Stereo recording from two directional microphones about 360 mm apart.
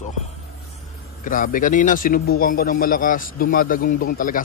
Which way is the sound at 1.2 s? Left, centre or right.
Left.